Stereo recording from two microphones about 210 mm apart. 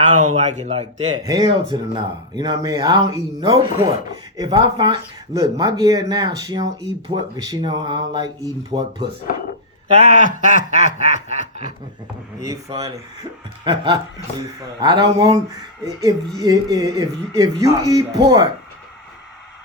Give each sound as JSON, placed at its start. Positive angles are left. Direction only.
{"t": 0.1, "sound": "snicker", "side_deg": -35}
{"t": 1.2, "sound": "speech", "side_deg": -20}
{"t": 9.3, "sound": "speech", "side_deg": 40}
{"t": 10.0, "sound": "snicker", "side_deg": -35}
{"t": 12.4, "sound": "speech", "side_deg": -15}